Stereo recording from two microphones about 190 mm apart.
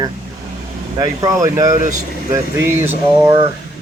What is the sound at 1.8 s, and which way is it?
Speech, 40° right (ahead or behind).